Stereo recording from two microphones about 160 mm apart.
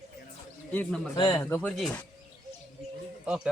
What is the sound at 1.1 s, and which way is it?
Speech, 25° left (ahead or behind).